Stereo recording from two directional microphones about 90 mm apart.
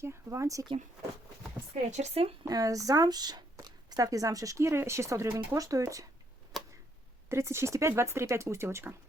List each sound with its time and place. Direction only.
0.0 s speech: 30° right (ahead or behind)
2.2 s speech: 90° right
2.5 s speech: 40° right (ahead or behind)
6.5 s a sound: centre (ahead or behind)
7.3 s speech: 30° right (ahead or behind)